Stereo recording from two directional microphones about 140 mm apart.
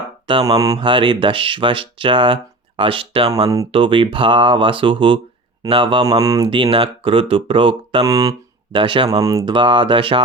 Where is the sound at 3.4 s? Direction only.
25° right (ahead or behind).